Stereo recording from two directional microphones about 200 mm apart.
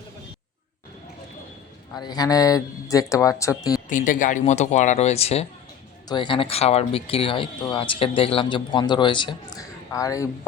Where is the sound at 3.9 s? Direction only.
40° left (ahead or behind).